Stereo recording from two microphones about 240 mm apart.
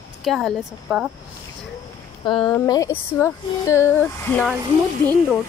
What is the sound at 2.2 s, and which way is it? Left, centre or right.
Speech, centre.